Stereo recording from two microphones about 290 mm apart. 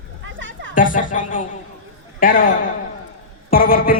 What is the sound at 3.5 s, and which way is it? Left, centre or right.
Speech, left.